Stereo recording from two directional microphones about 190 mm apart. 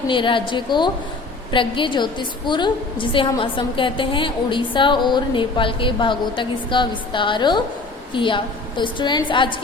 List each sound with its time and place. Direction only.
0.1 s a woman's voice: 25° left (ahead or behind)